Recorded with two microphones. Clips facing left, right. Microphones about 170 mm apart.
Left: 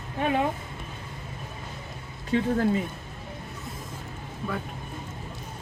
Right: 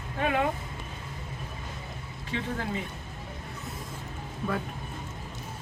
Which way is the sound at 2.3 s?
40° left (ahead or behind).